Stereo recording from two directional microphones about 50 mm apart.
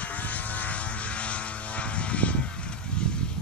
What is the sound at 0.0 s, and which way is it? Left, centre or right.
Vehicle, left.